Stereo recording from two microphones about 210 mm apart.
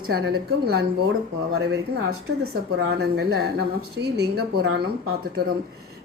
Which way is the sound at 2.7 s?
55° right (ahead or behind).